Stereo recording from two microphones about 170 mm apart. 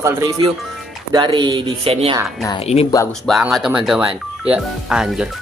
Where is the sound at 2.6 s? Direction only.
35° left (ahead or behind).